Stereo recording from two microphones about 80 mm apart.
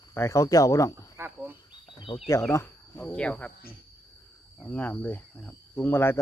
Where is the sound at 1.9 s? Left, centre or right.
Left.